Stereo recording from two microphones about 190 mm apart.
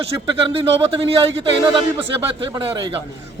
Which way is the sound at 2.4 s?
25° right (ahead or behind).